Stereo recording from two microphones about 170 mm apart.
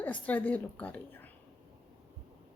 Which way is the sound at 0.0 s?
10° left (ahead or behind).